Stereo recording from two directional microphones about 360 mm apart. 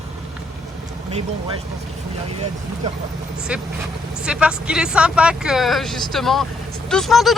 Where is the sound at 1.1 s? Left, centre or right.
Centre.